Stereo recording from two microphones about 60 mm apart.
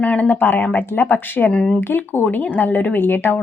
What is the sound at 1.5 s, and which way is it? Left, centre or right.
Speech, centre.